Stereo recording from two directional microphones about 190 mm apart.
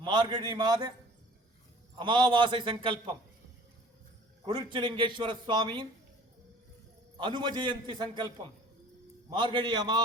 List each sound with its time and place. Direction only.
0.0 s a man's voice: 25° right (ahead or behind)
2.0 s a man's voice: 25° right (ahead or behind)
4.7 s a man's voice: 25° right (ahead or behind)
7.2 s a man's voice: 25° right (ahead or behind)